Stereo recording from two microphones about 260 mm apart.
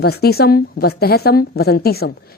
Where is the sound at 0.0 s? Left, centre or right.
Left.